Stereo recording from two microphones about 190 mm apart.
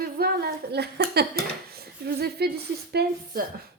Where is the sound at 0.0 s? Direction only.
55° right (ahead or behind).